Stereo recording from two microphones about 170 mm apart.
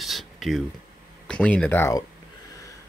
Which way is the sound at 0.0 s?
Centre (ahead or behind).